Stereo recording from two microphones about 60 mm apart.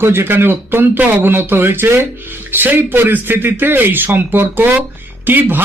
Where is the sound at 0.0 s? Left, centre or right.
Right.